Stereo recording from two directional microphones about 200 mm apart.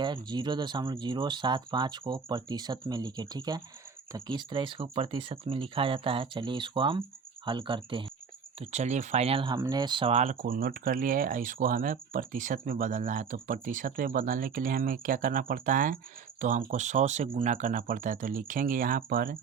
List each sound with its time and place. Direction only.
0.0 s speech: 20° right (ahead or behind); by 19.4 s 45° right (ahead or behind)